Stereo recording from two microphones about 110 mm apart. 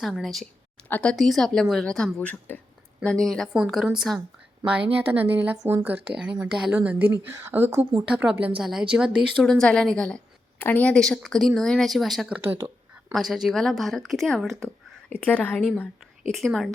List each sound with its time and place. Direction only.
0.0 s speech: centre (ahead or behind)
0.9 s speech: 15° left (ahead or behind)
1.1 s speech: centre (ahead or behind)
4.9 s speech: 15° right (ahead or behind)
7.1 s speech: 25° right (ahead or behind); by 9.5 s 5° right (ahead or behind)
9.5 s speech: 5° left (ahead or behind)
15.1 s speech: 10° left (ahead or behind)